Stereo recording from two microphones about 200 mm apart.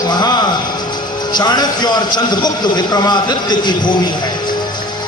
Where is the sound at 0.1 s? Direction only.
20° left (ahead or behind).